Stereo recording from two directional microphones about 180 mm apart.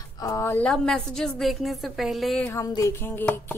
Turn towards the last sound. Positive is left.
turn(degrees=10)  # may be behind; listen again after turning